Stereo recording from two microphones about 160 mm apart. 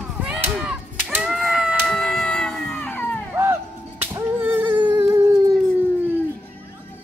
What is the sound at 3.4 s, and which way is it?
Music, 15° right (ahead or behind).